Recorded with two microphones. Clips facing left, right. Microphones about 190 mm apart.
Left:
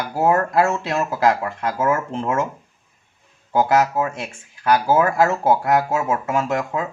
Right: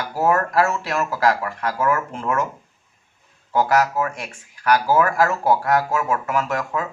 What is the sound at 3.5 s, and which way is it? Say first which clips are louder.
Speech: left 1 dB; 20° left (ahead or behind).